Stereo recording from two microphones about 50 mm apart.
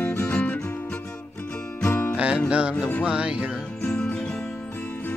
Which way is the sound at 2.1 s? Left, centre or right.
Right.